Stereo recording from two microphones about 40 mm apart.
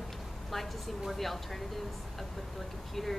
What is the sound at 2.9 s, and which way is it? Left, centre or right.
Speech, centre.